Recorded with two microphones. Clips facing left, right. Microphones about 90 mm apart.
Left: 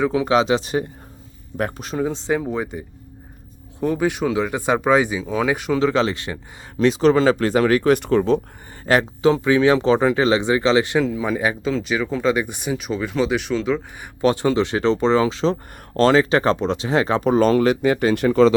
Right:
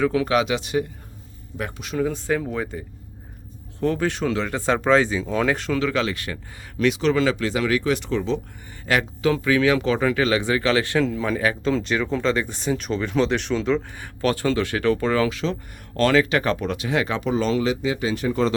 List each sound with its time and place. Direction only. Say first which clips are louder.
0.0 s speech: left 2 dB; 20° left (ahead or behind); by 2.0 s 40° left (ahead or behind)
2.0 s speech: left 1 dB; 25° left (ahead or behind)
5.8 s speech: left 5 dB; 30° left (ahead or behind); by 8.4 s 55° left (ahead or behind)
8.9 s speech: left 5 dB; 30° left (ahead or behind)
11.6 s speech: even; 5° left (ahead or behind)
14.0 s speech: left 4 dB; 20° left (ahead or behind); by 18.4 s 70° left (ahead or behind)